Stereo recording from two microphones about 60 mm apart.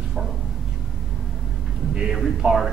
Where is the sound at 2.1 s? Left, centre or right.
Centre.